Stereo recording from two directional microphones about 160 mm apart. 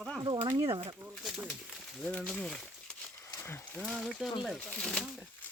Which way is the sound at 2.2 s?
Centre (ahead or behind).